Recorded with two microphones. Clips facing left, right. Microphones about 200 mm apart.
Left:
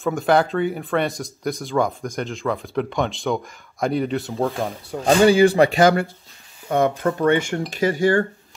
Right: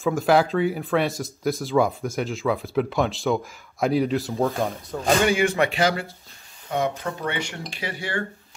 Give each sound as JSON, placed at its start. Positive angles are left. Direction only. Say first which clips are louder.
{"t": 0.0, "sound": "speech", "louder": "left 1 dB", "side_deg": 0}
{"t": 5.0, "sound": "speech", "louder": "left 6 dB", "side_deg": 35}